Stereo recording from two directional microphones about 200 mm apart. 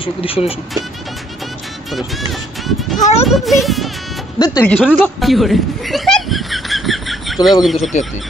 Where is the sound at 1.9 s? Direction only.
Centre (ahead or behind).